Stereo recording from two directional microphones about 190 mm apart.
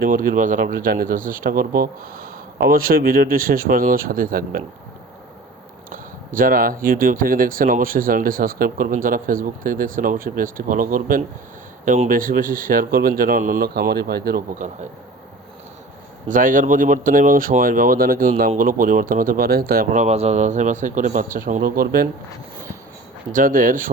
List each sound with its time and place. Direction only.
0.0 s speech: 45° right (ahead or behind)
5.9 s speech: 45° right (ahead or behind)
16.3 s speech: 45° right (ahead or behind)
23.3 s speech: 45° right (ahead or behind)